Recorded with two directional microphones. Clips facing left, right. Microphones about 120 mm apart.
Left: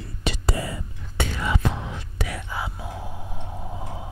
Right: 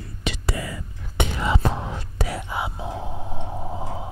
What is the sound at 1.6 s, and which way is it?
Whispering, 40° right (ahead or behind).